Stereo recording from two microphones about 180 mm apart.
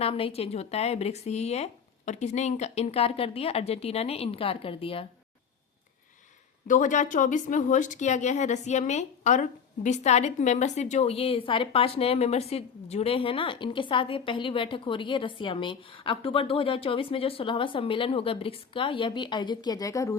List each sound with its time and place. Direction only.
0.0 s a woman's voice: 35° left (ahead or behind)
6.7 s a woman's voice: 45° left (ahead or behind); by 20.1 s 15° left (ahead or behind)